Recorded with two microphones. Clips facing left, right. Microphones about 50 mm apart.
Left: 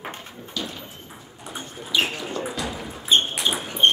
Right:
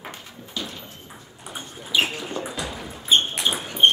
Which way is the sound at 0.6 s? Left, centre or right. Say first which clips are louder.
Left 1 dB; right.